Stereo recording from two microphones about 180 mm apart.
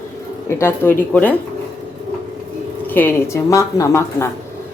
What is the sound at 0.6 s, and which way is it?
Speech, 10° left (ahead or behind).